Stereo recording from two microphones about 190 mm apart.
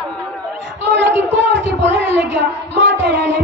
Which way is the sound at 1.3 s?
70° right (ahead or behind).